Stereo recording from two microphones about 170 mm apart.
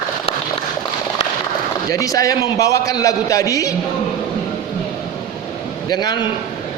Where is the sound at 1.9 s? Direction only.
20° left (ahead or behind).